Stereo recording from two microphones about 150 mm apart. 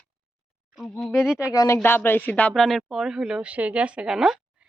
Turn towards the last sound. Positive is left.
turn(degrees=-5)  # may be behind; listen again after turning